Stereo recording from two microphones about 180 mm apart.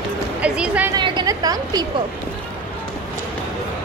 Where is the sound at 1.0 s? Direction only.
25° right (ahead or behind).